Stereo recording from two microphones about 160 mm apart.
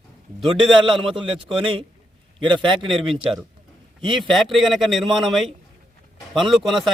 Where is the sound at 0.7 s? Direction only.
Centre (ahead or behind).